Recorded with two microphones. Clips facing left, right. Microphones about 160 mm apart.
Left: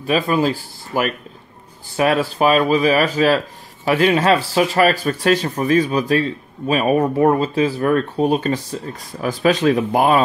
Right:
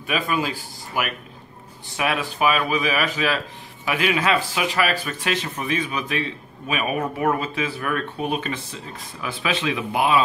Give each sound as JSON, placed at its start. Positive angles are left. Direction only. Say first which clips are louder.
{"t": 0.0, "sound": "a man's voice", "louder": "left 7 dB", "side_deg": 40}